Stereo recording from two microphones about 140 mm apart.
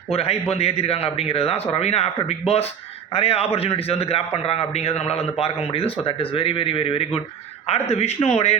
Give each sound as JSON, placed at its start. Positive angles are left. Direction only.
{"t": 0.1, "sound": "a man's voice", "side_deg": 45}